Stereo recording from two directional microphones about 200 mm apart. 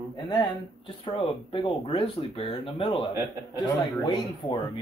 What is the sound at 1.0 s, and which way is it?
Speech, 25° left (ahead or behind).